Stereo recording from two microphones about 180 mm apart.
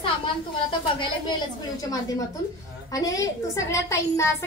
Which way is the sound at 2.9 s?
20° left (ahead or behind).